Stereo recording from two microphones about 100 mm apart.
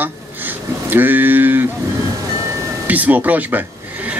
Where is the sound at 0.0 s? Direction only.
20° right (ahead or behind).